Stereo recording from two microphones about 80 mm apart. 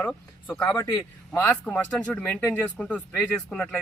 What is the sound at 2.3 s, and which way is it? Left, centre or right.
Speech, left.